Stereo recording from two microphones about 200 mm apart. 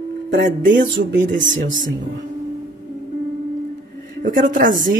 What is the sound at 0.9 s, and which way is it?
Speech, 65° right (ahead or behind).